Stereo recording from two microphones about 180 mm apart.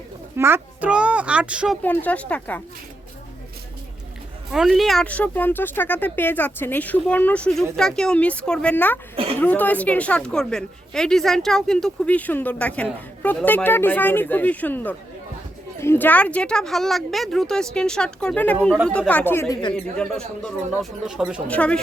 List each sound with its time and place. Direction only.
0.3 s a child's voice: 15° right (ahead or behind)
1.8 s a woman's voice: 10° left (ahead or behind)
4.5 s a woman's voice: centre (ahead or behind)
9.1 s a sound: 30° right (ahead or behind)
9.4 s a woman's voice: 10° left (ahead or behind)
21.4 s a woman's voice: 5° left (ahead or behind)